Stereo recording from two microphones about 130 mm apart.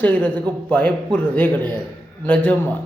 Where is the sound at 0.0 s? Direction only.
10° left (ahead or behind).